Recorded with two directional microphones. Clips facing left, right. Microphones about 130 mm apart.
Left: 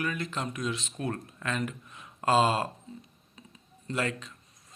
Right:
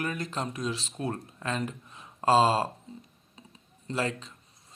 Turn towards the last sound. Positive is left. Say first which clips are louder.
# right 1 dB
turn(degrees=-30)  # may be behind; listen again after turning